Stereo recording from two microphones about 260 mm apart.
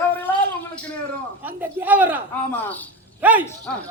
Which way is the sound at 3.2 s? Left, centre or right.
Centre.